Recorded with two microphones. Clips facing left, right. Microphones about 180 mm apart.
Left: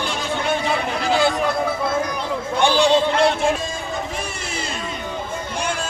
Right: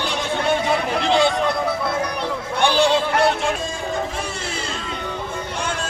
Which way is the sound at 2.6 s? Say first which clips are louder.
Even; 15° left (ahead or behind).